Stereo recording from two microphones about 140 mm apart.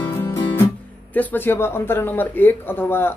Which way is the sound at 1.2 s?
15° left (ahead or behind).